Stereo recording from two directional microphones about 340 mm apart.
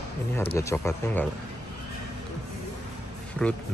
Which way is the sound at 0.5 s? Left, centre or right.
Centre.